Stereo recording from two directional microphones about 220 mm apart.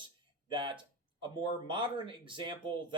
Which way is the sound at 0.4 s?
20° right (ahead or behind).